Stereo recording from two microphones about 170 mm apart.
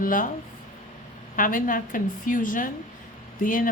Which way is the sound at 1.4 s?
50° left (ahead or behind).